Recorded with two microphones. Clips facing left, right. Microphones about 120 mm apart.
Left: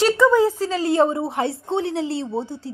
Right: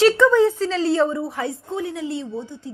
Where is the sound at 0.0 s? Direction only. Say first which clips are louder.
Right 1 dB; 5° left (ahead or behind).